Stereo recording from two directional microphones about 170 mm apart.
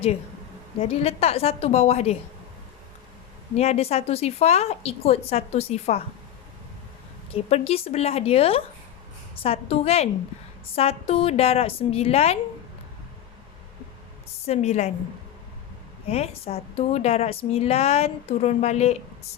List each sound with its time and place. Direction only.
0.8 s a woman's voice: 35° left (ahead or behind)
3.6 s a woman's voice: 40° left (ahead or behind)
7.5 s a woman's voice: 35° left (ahead or behind)
14.4 s a woman's voice: 40° left (ahead or behind)
16.0 s a woman's voice: 35° left (ahead or behind)